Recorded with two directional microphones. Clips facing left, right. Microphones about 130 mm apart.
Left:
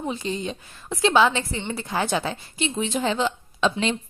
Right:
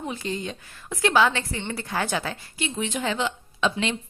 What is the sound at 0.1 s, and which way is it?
A woman's voice, 20° left (ahead or behind).